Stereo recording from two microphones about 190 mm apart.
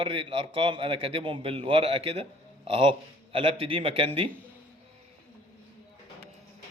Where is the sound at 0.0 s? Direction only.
25° right (ahead or behind).